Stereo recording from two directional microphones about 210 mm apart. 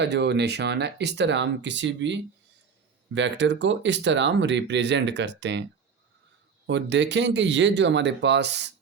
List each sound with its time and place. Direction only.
0.0 s speech: 55° right (ahead or behind)
6.7 s speech: 55° right (ahead or behind)